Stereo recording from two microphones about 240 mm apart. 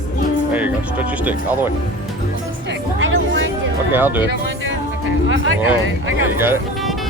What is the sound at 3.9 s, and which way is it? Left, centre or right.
Speech, centre.